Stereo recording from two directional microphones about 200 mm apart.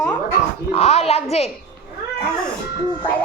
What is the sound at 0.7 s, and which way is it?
Speech, 30° left (ahead or behind).